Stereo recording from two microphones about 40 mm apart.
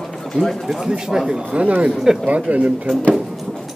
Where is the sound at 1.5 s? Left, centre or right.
Right.